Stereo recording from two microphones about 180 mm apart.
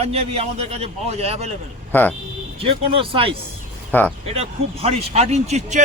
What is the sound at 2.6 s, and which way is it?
Speech, 30° right (ahead or behind).